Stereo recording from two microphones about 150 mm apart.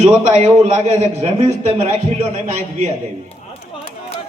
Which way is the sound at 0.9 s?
50° right (ahead or behind).